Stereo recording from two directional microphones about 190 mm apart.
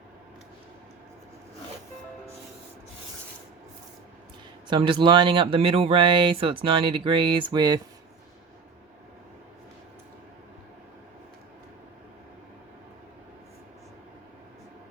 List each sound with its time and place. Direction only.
4.7 s speech: 25° right (ahead or behind)